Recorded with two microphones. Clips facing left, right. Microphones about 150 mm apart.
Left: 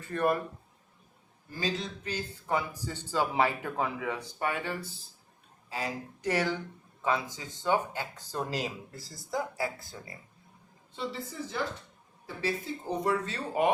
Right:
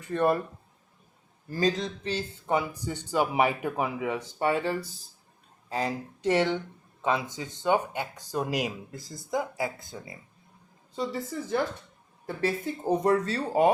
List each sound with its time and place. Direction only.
0.0 s speech: 25° right (ahead or behind)
1.5 s speech: 40° right (ahead or behind)
6.2 s speech: 25° right (ahead or behind)
10.9 s a woman's voice: 40° right (ahead or behind)
13.0 s a woman's voice: 40° right (ahead or behind)